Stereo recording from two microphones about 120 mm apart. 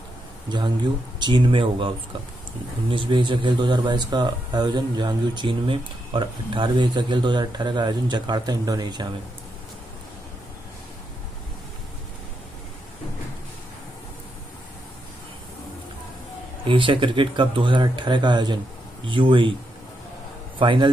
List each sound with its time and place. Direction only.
1.2 s speech: 40° right (ahead or behind)
16.6 s speech: 45° right (ahead or behind)
20.5 s speech: 40° right (ahead or behind)